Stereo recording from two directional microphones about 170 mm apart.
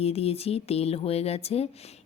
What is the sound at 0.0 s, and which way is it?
Speech, 35° left (ahead or behind).